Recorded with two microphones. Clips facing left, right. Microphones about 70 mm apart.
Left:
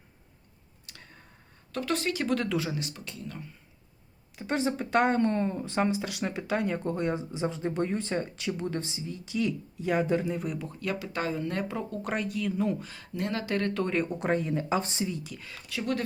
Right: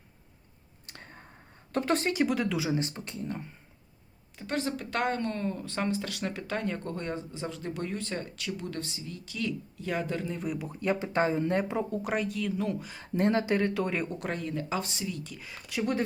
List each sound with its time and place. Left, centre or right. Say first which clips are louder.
0.9 s a sound: right 3 dB; right
1.7 s speech: right 2 dB; right
2.2 s speech: even; centre
2.7 s speech: right 4 dB; right
4.4 s speech: left 3 dB; centre
10.4 s speech: right 1 dB; centre
10.7 s speech: right 4 dB; right
12.0 s speech: even; centre
13.1 s speech: right 4 dB; right; by 14.2 s centre
14.2 s speech: left 5 dB; left
15.2 s speech: even; centre
15.4 s speech: right 1 dB; centre